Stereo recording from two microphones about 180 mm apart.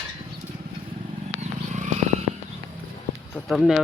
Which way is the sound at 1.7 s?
40° right (ahead or behind).